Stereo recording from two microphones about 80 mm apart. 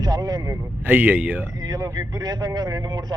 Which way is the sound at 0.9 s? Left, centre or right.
Right.